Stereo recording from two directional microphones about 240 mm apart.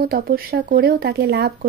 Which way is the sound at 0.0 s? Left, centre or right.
Right.